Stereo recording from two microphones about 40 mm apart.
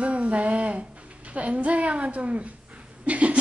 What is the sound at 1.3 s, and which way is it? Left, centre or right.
A woman's voice, right.